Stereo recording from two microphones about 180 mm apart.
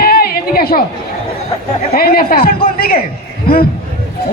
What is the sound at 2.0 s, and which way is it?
A man's voice, 55° left (ahead or behind).